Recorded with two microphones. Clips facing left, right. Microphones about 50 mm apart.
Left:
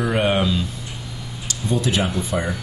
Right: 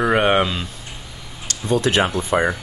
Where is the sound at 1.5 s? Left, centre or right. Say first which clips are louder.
Right 3 dB; right.